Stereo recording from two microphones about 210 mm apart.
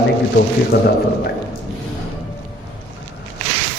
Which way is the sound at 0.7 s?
50° left (ahead or behind).